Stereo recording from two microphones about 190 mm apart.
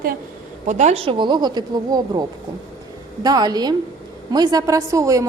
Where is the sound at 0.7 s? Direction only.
40° right (ahead or behind); by 2.2 s 20° right (ahead or behind).